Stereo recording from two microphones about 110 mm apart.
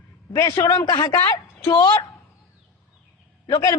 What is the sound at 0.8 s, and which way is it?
Speech, 40° left (ahead or behind).